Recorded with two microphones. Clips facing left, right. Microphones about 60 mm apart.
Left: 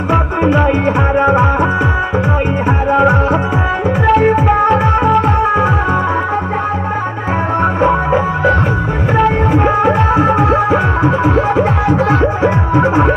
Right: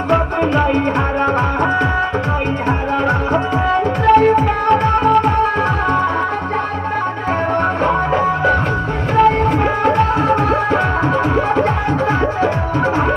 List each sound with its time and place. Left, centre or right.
0.1 s music: centre
2.9 s music: centre
7.8 s music: centre
12.7 s throbbing: centre